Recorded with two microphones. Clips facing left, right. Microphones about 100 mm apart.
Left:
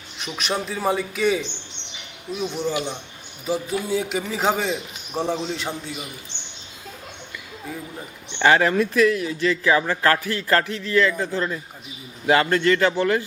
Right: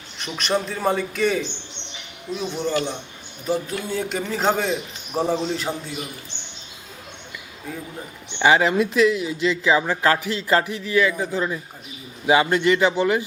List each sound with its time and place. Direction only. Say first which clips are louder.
0.2 s a man's voice: right 3 dB; centre (ahead or behind)
8.4 s speech: even; 15° right (ahead or behind)